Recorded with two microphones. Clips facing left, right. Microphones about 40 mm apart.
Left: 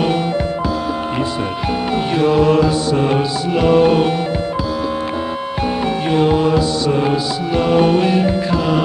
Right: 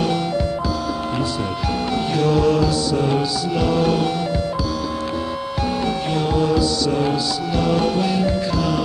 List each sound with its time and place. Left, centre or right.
2.1 s music: left
6.0 s music: left